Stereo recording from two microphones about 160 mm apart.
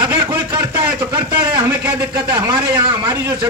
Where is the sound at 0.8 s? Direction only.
10° right (ahead or behind).